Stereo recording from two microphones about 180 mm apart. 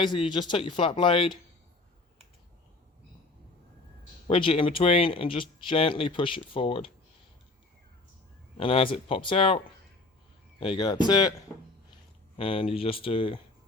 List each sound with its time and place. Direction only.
0.0 s speech: 25° left (ahead or behind)
4.3 s speech: 30° left (ahead or behind)
8.5 s speech: 30° left (ahead or behind)
10.6 s speech: 25° left (ahead or behind)
12.4 s speech: 30° left (ahead or behind)